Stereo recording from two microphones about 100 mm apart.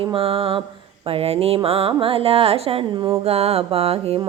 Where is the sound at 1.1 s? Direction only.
75° right (ahead or behind); by 3.1 s 50° right (ahead or behind).